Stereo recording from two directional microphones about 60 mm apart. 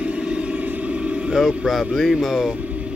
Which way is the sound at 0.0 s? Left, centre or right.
Centre.